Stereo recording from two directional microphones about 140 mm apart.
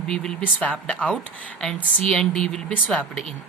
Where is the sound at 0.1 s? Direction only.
5° left (ahead or behind).